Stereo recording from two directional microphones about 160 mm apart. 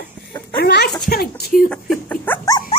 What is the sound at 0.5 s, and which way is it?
Speech, 90° left.